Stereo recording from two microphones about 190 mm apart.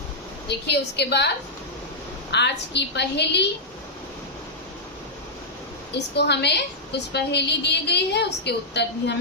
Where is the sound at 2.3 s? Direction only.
65° left (ahead or behind).